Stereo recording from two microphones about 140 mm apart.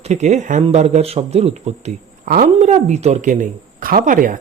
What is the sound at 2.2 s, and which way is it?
Speech, 90° right.